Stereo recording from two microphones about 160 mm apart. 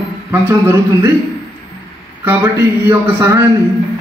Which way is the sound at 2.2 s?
15° right (ahead or behind).